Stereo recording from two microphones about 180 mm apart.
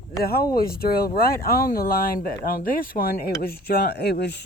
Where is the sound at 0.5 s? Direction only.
55° left (ahead or behind).